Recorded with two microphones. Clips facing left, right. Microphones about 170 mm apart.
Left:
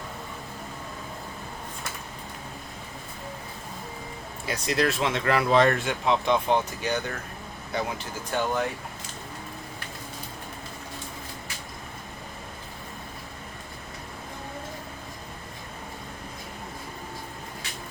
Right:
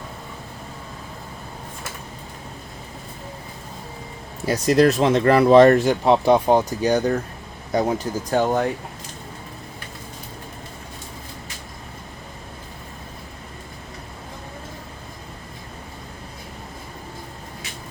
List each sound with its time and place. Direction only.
4.4 s speech: 40° right (ahead or behind)